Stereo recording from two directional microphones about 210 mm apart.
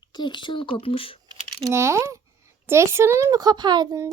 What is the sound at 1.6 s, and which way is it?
Speech, 15° right (ahead or behind).